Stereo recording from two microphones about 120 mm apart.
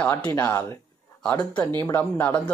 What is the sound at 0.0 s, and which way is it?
Speech, 10° left (ahead or behind).